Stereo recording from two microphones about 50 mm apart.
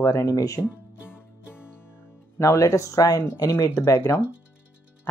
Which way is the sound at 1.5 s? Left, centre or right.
Left.